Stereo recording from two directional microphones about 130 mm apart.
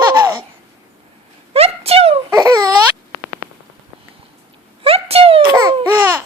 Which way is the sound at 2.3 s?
30° right (ahead or behind).